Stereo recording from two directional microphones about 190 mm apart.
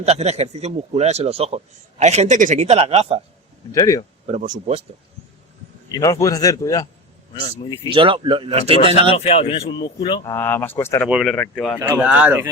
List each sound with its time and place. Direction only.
0.0 s a man's voice: 35° right (ahead or behind)
3.7 s a man's voice: 15° left (ahead or behind)
4.3 s a man's voice: 40° right (ahead or behind)
5.9 s a man's voice: 15° left (ahead or behind)
7.9 s speech: 25° right (ahead or behind)
9.0 s speech: 35° left (ahead or behind)
10.3 s a man's voice: 10° left (ahead or behind)
11.1 s speech: centre (ahead or behind)
11.8 s speech: 5° right (ahead or behind)